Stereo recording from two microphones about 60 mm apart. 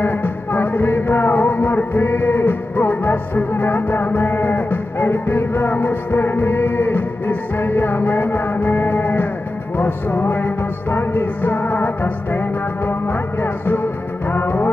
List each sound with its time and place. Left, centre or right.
0.0 s music: left